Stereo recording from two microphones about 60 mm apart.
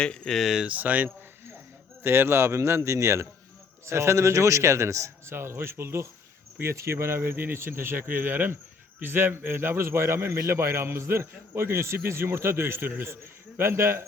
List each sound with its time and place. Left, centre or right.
0.0 s speech: centre
0.3 s speech: centre
0.7 s speech: right
2.0 s speech: right